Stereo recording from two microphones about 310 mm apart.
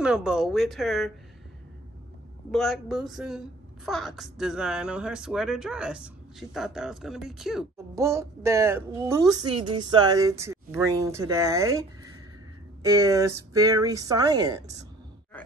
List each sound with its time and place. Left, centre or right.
0.0 s a woman's voice: centre
2.5 s a woman's voice: centre
12.8 s speech: centre